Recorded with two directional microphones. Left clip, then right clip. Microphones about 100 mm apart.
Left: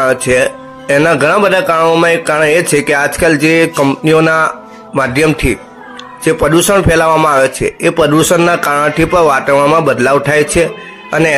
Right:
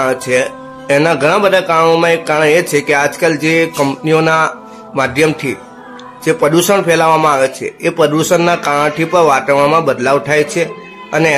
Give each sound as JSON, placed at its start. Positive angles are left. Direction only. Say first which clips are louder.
{"t": 0.0, "sound": "a man's voice", "louder": "left 3 dB", "side_deg": 40}